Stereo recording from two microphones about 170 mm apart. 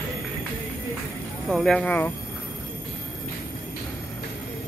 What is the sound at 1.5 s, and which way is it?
Speech, 5° left (ahead or behind).